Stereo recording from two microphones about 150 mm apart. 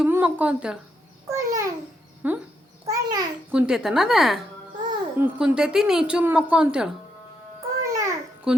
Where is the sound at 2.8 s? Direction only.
25° right (ahead or behind).